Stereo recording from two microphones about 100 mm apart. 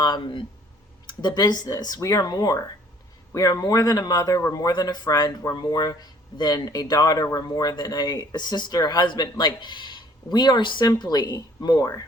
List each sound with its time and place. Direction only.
0.0 s speech: 50° left (ahead or behind)